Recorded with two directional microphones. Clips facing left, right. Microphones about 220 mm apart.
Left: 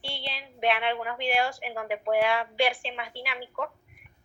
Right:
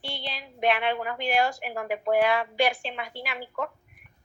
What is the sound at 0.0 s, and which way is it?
A woman's voice, 45° right (ahead or behind).